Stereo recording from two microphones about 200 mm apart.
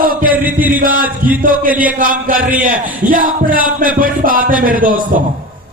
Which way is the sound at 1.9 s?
45° right (ahead or behind).